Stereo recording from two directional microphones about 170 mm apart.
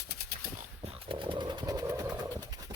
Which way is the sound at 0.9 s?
30° right (ahead or behind).